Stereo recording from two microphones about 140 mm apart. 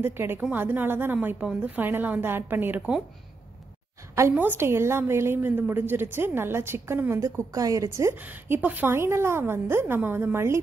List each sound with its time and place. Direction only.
0.0 s a woman's voice: 15° right (ahead or behind)
4.1 s a woman's voice: 15° right (ahead or behind)